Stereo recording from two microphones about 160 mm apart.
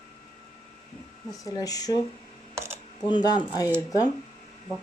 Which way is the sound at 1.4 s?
20° left (ahead or behind).